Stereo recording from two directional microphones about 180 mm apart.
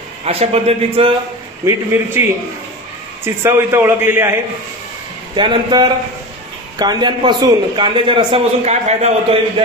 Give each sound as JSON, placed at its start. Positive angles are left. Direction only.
{"t": 0.2, "sound": "a man's voice", "side_deg": -35}
{"t": 1.7, "sound": "a man's voice", "side_deg": -15}
{"t": 5.3, "sound": "a man's voice", "side_deg": -25}